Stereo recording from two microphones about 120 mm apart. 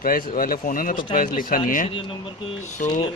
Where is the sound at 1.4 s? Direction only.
90° left.